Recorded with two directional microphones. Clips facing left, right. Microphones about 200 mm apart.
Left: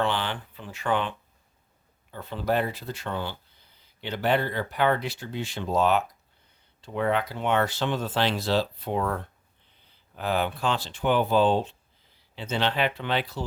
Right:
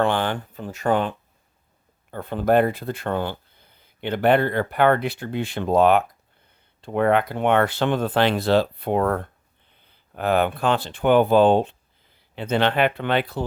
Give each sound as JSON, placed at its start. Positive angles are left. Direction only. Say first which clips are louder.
{"t": 0.0, "sound": "speech", "louder": "right 6 dB", "side_deg": -50}
{"t": 2.0, "sound": "speech", "louder": "right 7 dB", "side_deg": -55}